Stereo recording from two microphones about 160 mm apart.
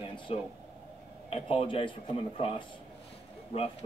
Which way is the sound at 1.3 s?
35° left (ahead or behind).